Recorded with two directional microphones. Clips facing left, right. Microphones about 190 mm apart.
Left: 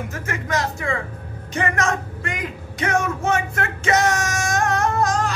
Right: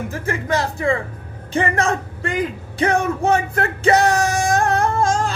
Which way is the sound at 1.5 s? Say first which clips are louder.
Right 3 dB; 30° right (ahead or behind).